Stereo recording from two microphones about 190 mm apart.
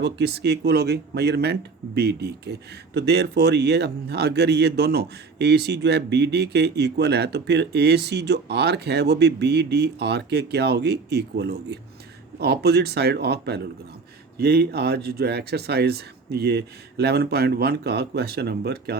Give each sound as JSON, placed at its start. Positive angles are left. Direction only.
{"t": 0.0, "sound": "speech", "side_deg": -60}